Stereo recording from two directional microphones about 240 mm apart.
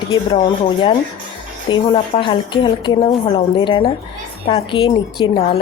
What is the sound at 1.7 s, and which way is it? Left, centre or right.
A woman's voice, left.